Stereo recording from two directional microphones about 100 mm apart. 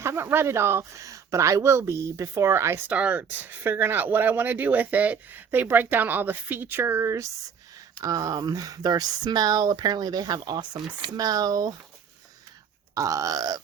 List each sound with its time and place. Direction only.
0.0 s speech: 25° right (ahead or behind)
2.9 s speech: 15° right (ahead or behind); by 11.7 s 40° right (ahead or behind)
12.9 s speech: 35° right (ahead or behind)